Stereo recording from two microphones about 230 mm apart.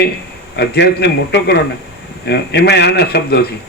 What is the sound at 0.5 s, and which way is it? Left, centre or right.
A man's voice, left.